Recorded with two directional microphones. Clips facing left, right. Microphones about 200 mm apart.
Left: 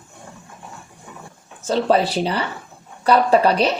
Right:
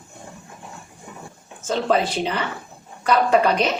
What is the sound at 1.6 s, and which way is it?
Speech, 35° left (ahead or behind).